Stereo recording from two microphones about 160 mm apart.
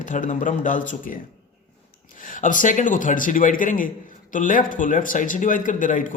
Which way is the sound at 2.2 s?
55° left (ahead or behind).